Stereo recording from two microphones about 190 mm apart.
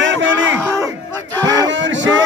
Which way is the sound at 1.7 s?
70° right (ahead or behind).